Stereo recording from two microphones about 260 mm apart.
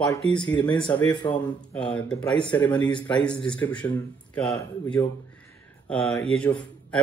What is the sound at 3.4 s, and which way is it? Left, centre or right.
A man's voice, centre.